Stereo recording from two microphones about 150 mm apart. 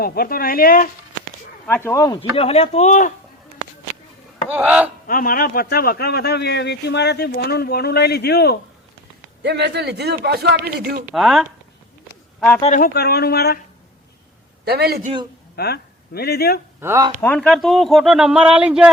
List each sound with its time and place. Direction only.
0.0 s speech: 90° left
1.6 s speech: 15° left (ahead or behind)
2.3 s speech: 40° left (ahead or behind)
4.4 s speech: 10° right (ahead or behind)
5.0 s speech: 65° left (ahead or behind); by 8.5 s 90° left
9.4 s a man's voice: 90° right
11.1 s speech: centre (ahead or behind)
12.7 s speech: 80° left
14.6 s a man's voice: 90° right
15.5 s speech: 90° left
16.8 s speech: 20° right (ahead or behind)
17.2 s speech: 10° left (ahead or behind); by 18.9 s 5° right (ahead or behind)